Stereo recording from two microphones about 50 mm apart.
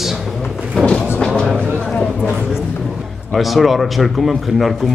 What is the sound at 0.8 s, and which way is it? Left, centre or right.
Speech, centre.